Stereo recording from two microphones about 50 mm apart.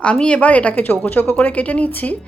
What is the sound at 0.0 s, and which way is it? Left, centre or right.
A woman's voice, left.